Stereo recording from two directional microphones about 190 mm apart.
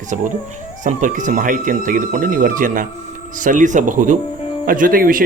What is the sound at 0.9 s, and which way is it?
A man's voice, 40° right (ahead or behind).